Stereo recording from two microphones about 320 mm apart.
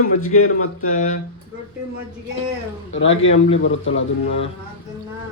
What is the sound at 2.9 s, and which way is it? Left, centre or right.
A man's voice, left.